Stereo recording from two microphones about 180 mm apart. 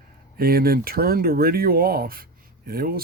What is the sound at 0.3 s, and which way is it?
Speech, 55° right (ahead or behind).